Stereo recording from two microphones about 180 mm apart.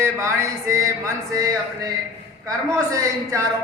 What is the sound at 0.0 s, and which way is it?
A woman's voice, 15° right (ahead or behind).